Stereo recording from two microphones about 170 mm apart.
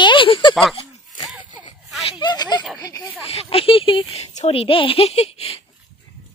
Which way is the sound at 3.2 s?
35° left (ahead or behind).